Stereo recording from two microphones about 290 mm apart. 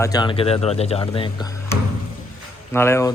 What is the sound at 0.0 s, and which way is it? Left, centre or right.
A man's voice, centre.